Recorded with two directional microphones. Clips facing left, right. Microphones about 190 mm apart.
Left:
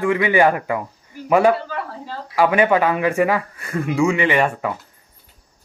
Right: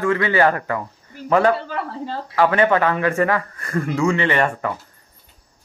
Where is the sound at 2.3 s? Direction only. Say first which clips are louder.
Left 1 dB; 10° left (ahead or behind).